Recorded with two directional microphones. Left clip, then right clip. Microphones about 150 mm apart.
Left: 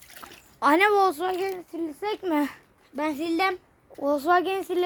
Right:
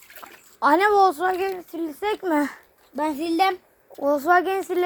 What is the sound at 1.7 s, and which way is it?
Speech, 20° right (ahead or behind).